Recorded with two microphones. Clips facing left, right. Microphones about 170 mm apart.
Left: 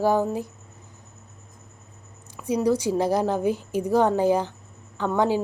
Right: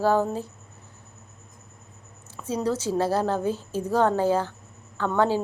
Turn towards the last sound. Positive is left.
turn(degrees=15)  # may be behind; listen again after turning